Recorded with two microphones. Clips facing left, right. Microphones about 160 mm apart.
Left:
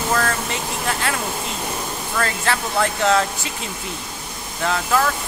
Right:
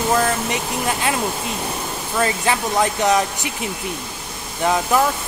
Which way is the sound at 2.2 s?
15° right (ahead or behind).